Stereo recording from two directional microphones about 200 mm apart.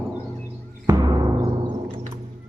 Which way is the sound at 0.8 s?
20° right (ahead or behind).